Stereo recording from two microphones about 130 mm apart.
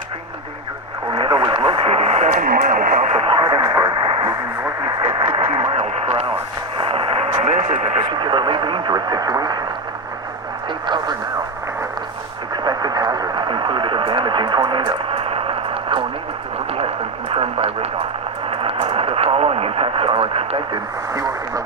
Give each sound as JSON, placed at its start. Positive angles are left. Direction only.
{"t": 1.1, "sound": "radio", "side_deg": -45}
{"t": 2.3, "sound": "radio", "side_deg": -90}
{"t": 3.2, "sound": "radio", "side_deg": -40}
{"t": 6.7, "sound": "a sound", "side_deg": -45}
{"t": 8.1, "sound": "radio", "side_deg": -40}
{"t": 10.8, "sound": "radio", "side_deg": -35}
{"t": 12.6, "sound": "radio", "side_deg": -30}
{"t": 21.1, "sound": "radio", "side_deg": -25}